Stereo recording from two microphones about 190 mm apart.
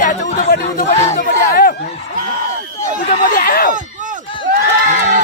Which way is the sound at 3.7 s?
40° right (ahead or behind).